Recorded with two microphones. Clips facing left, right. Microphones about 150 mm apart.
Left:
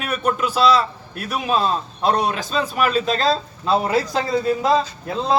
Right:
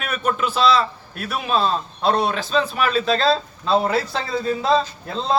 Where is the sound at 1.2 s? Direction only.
40° left (ahead or behind).